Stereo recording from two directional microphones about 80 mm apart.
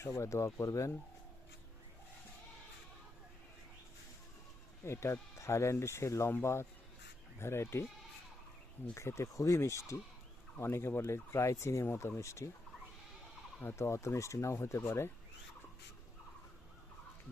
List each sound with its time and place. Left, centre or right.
0.0 s speech: left
4.9 s speech: left
9.0 s speech: left
13.6 s speech: left